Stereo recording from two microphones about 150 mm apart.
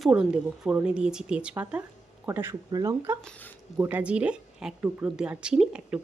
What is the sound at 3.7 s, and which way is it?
A woman's voice, 10° right (ahead or behind).